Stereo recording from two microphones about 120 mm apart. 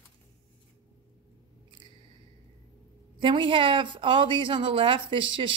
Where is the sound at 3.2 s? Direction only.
45° right (ahead or behind).